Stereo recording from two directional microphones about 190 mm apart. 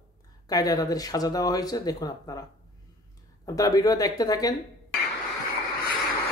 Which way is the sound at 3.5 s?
20° left (ahead or behind).